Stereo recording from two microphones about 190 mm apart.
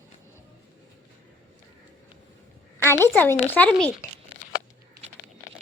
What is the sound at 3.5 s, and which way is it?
Speech, 5° left (ahead or behind).